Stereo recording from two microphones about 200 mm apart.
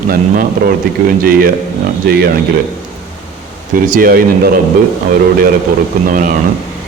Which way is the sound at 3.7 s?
45° right (ahead or behind).